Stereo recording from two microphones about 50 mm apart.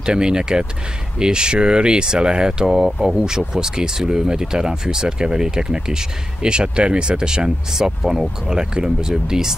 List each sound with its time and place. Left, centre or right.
0.0 s speech: centre